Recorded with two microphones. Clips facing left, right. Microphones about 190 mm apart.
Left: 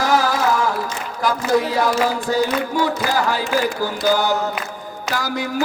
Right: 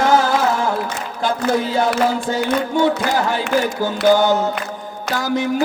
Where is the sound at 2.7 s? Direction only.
25° right (ahead or behind).